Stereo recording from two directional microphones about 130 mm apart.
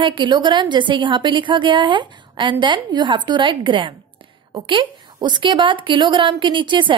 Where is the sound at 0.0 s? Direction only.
40° right (ahead or behind).